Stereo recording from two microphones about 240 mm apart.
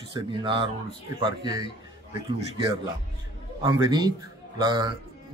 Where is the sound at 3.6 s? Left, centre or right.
Centre.